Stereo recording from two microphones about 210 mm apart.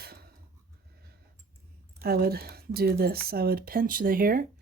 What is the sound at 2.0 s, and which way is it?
Speech, 45° right (ahead or behind).